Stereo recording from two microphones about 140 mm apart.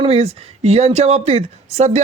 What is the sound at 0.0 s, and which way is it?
Speech, 45° right (ahead or behind).